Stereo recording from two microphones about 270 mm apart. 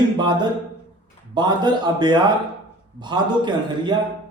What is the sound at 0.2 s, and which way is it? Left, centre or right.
Speech, centre.